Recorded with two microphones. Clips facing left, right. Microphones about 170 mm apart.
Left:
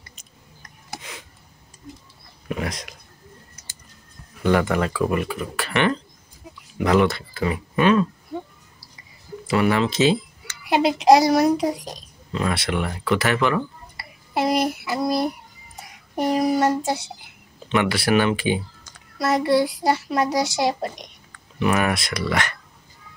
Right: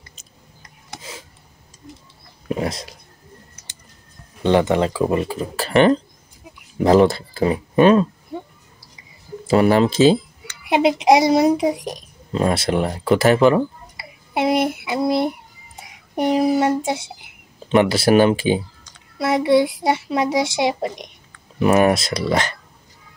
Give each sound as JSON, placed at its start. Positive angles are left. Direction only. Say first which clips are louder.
{"t": 2.4, "sound": "a sound", "louder": "right 5 dB", "side_deg": -30}
{"t": 4.4, "sound": "a child's voice", "louder": "right 4 dB", "side_deg": -25}
{"t": 9.5, "sound": "speech", "louder": "right 5 dB", "side_deg": -35}
{"t": 10.7, "sound": "a child's voice", "louder": "right 1 dB", "side_deg": -20}
{"t": 12.3, "sound": "speech", "louder": "right 5 dB", "side_deg": -35}
{"t": 14.3, "sound": "a sound", "louder": "right 3 dB", "side_deg": -25}
{"t": 17.6, "sound": "speech", "louder": "right 6 dB", "side_deg": -35}
{"t": 19.1, "sound": "a child's voice", "louder": "right 3 dB", "side_deg": -20}
{"t": 21.5, "sound": "speech", "louder": "right 6 dB", "side_deg": -35}